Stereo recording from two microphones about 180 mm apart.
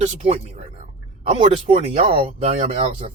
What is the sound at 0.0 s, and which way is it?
Speech, 35° right (ahead or behind).